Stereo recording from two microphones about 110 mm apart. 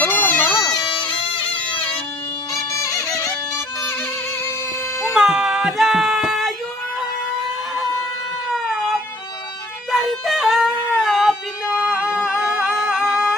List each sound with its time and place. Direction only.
0.0 s bagpipes: 15° left (ahead or behind)
0.6 s bagpipes: 35° left (ahead or behind); by 1.5 s 55° left (ahead or behind)
2.5 s music: 30° left (ahead or behind)
5.1 s music: 5° right (ahead or behind)
8.6 s music: centre (ahead or behind)
9.9 s a sound: centre (ahead or behind)